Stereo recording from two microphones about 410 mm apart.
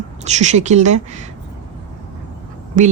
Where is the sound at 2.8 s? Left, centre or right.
Centre.